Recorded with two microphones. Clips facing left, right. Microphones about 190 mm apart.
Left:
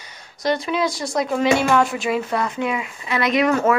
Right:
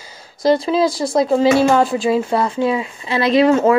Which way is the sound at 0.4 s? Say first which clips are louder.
Right 6 dB; 30° right (ahead or behind).